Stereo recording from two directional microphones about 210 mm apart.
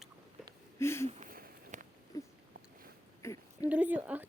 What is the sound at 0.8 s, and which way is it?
Speech, 10° left (ahead or behind).